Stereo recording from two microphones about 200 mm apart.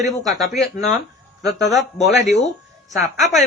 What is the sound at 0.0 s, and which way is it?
Speech, 15° right (ahead or behind).